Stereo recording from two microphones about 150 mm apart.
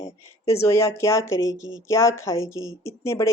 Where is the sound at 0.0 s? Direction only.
20° left (ahead or behind).